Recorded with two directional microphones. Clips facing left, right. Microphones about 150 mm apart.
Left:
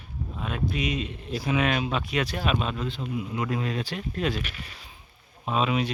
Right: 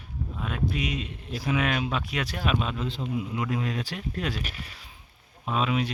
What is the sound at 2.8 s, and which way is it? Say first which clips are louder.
Speech: right 1 dB; 25° right (ahead or behind).